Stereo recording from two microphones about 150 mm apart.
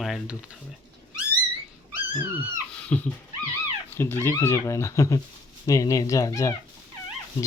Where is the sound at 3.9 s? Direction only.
15° left (ahead or behind).